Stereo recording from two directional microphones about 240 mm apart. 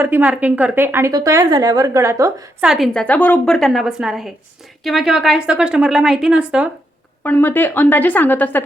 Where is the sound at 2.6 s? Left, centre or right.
Centre.